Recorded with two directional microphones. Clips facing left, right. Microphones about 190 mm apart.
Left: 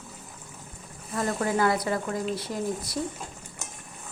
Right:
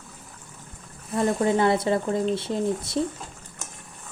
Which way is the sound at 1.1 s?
25° right (ahead or behind).